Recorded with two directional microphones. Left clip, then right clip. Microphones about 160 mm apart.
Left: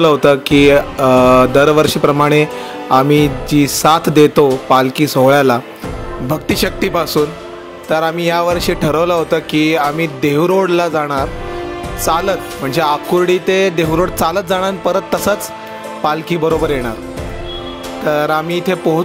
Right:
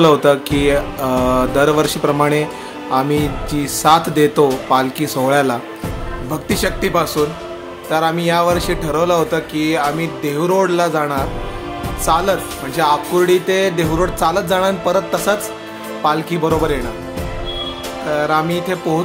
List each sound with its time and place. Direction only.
0.0 s mantra: 40° left (ahead or behind)
6.3 s speech: 50° left (ahead or behind)
16.0 s mantra: 40° left (ahead or behind)
18.1 s speech: 50° left (ahead or behind)